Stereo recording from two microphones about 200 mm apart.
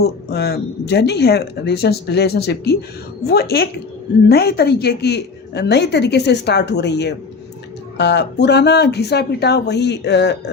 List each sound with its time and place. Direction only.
0.0 s a woman's voice: 55° left (ahead or behind)